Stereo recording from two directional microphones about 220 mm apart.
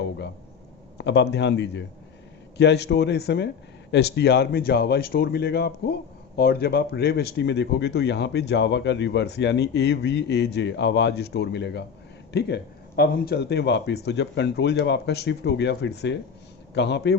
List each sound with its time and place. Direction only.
0.9 s speech: 50° left (ahead or behind)